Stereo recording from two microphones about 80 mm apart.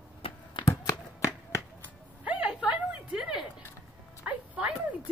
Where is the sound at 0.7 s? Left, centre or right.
Left.